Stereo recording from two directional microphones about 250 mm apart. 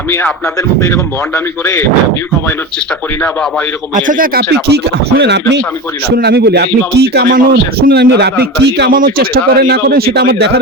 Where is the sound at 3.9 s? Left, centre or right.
Right.